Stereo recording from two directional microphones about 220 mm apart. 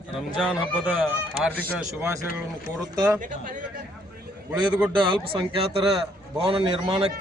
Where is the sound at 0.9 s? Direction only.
5° right (ahead or behind).